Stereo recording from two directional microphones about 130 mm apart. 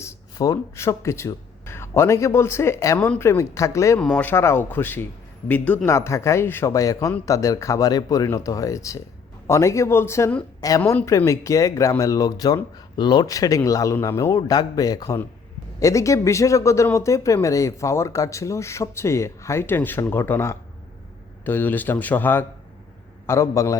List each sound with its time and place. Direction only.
0.0 s speech: 25° left (ahead or behind)
4.0 s speech: 10° left (ahead or behind)